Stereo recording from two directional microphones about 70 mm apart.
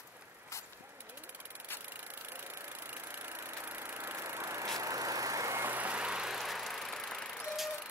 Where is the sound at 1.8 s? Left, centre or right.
Right.